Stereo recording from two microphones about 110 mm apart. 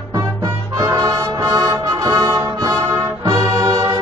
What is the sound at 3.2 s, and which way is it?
Brass instrument, 30° right (ahead or behind).